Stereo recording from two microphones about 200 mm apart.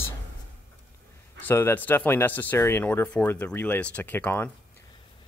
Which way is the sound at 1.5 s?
10° left (ahead or behind).